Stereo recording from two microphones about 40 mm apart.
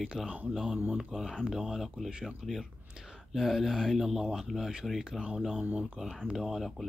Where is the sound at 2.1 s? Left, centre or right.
Centre.